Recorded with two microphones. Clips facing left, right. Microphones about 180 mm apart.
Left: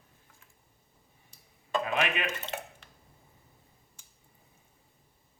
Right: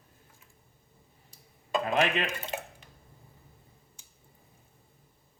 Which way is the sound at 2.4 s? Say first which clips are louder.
Right 1 dB; 10° right (ahead or behind).